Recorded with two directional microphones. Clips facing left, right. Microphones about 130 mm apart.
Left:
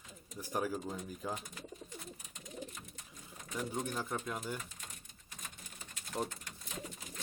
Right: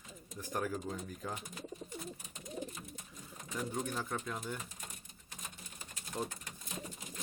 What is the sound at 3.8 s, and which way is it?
Speech, 5° left (ahead or behind).